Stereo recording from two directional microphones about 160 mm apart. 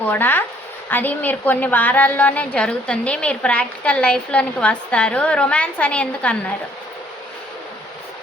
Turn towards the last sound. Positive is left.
turn(degrees=5)  # may be behind; listen again after turning